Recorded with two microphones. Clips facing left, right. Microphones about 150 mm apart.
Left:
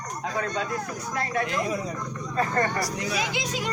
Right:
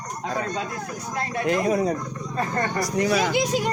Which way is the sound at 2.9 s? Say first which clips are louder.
Right 8 dB; 55° right (ahead or behind).